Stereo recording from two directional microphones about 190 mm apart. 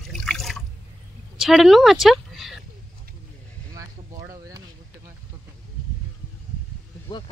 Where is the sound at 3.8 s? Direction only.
15° right (ahead or behind).